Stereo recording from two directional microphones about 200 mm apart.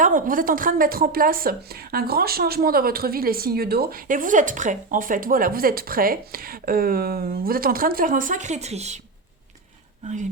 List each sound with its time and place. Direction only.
0.0 s a woman's voice: 40° right (ahead or behind)